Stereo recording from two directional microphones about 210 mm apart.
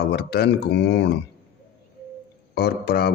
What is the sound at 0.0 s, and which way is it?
Speech, 50° left (ahead or behind).